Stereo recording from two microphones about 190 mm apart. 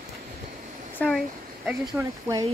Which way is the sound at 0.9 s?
Centre (ahead or behind).